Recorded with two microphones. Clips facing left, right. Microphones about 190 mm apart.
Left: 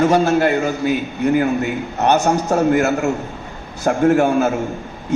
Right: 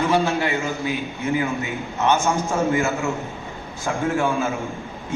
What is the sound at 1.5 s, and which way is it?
A man's voice, 65° left (ahead or behind).